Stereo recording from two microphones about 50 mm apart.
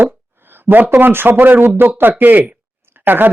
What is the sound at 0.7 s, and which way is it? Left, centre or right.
Speech, right.